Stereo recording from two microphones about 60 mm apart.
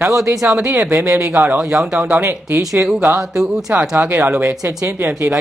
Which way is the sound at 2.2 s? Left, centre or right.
Right.